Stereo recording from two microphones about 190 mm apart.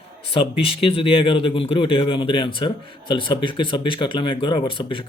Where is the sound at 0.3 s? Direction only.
30° left (ahead or behind).